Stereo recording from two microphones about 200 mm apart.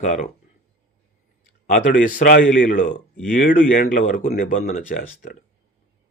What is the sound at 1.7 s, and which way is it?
Speech, 45° left (ahead or behind).